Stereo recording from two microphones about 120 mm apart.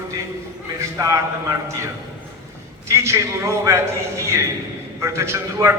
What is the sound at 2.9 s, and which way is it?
Speech, 25° right (ahead or behind).